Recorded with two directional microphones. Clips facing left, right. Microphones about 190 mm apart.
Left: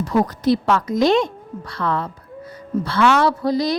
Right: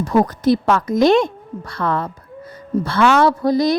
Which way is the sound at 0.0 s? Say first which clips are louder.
Right 3 dB; 50° right (ahead or behind).